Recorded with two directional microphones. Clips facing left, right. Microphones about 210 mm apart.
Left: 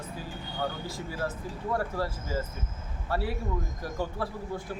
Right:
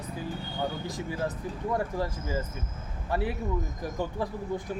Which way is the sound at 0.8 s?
20° right (ahead or behind).